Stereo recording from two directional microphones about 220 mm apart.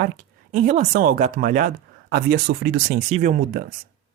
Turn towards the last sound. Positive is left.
turn(degrees=-35)  # may be behind; listen again after turning